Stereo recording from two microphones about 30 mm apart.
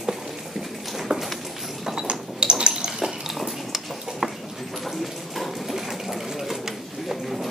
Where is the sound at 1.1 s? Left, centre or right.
Right.